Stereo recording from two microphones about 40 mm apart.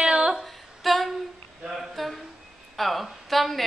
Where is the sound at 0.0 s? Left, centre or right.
Centre.